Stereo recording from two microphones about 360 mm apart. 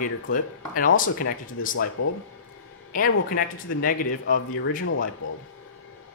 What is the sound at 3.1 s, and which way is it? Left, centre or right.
Speech, left.